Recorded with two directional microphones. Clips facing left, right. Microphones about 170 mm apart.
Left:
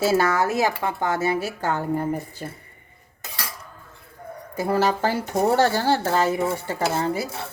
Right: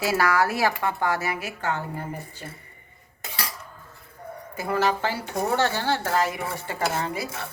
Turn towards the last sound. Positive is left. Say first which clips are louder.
# left 4 dB
turn(degrees=30)  # may be behind; listen again after turning